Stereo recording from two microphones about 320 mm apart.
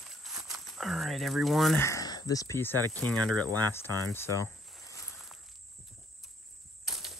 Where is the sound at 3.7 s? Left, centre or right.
Centre.